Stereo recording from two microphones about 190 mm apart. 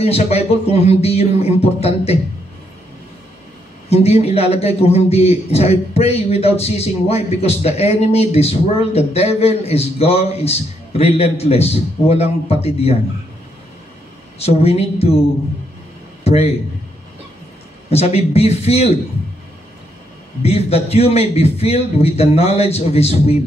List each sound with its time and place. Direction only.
0.0 s a man's voice: 30° left (ahead or behind)
3.9 s a man's voice: 35° left (ahead or behind)
14.4 s a man's voice: 30° left (ahead or behind)
16.3 s a man's voice: 30° left (ahead or behind)
17.8 s a man's voice: 35° left (ahead or behind)
20.4 s a man's voice: 30° left (ahead or behind)